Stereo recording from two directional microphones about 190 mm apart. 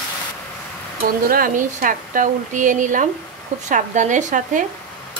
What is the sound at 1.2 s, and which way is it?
Speech, 50° right (ahead or behind).